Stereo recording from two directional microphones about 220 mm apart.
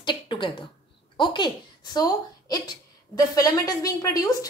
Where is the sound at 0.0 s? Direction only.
20° left (ahead or behind).